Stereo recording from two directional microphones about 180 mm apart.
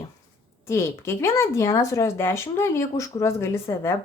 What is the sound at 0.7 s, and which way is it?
Speech, 15° left (ahead or behind).